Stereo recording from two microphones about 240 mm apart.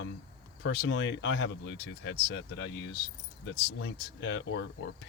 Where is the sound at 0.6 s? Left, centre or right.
Left.